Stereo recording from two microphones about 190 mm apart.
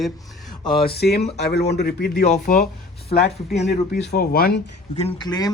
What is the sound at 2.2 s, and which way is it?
Speech, 40° left (ahead or behind).